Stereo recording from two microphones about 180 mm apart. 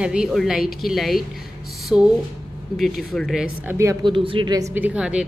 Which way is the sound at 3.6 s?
15° right (ahead or behind).